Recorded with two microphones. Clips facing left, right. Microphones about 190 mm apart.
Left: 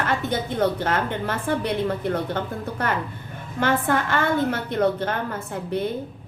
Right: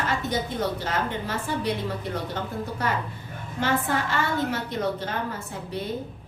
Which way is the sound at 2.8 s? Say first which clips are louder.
Left 4 dB; 55° left (ahead or behind).